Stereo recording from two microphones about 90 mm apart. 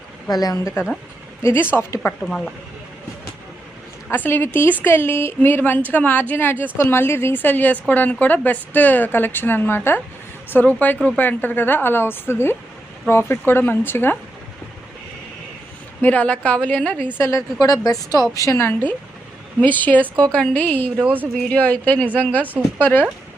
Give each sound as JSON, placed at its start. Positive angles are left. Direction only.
{"t": 0.3, "sound": "a woman's voice", "side_deg": 45}
{"t": 1.4, "sound": "speech", "side_deg": 30}
{"t": 2.2, "sound": "speech", "side_deg": 5}
{"t": 4.1, "sound": "a woman's voice", "side_deg": 25}
{"t": 16.0, "sound": "a woman's voice", "side_deg": 15}
{"t": 17.2, "sound": "a woman's voice", "side_deg": 30}
{"t": 18.3, "sound": "a woman's voice", "side_deg": 35}
{"t": 21.0, "sound": "speech", "side_deg": -20}
{"t": 21.5, "sound": "a woman's voice", "side_deg": 20}